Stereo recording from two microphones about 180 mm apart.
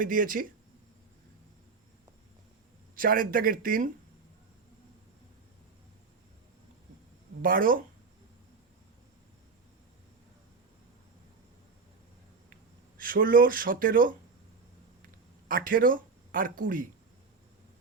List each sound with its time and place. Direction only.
0.0 s speech: 50° right (ahead or behind)
2.9 s speech: 50° right (ahead or behind)
7.4 s speech: 50° right (ahead or behind)
13.0 s speech: 50° right (ahead or behind)
15.4 s speech: 50° right (ahead or behind)